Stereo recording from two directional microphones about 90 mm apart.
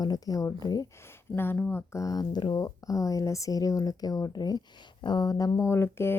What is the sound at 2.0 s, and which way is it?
Speech, 45° left (ahead or behind).